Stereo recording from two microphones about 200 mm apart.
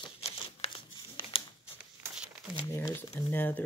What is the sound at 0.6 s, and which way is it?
Crumpling, 25° left (ahead or behind).